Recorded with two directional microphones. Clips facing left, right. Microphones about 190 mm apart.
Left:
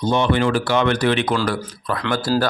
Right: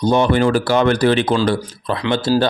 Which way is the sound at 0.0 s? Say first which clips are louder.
Right 4 dB; 40° right (ahead or behind).